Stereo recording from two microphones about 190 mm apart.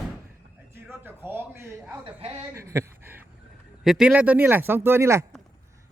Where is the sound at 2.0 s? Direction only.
30° right (ahead or behind).